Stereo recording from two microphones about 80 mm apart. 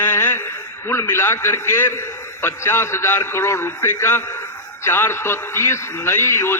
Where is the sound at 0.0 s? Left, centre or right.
Left.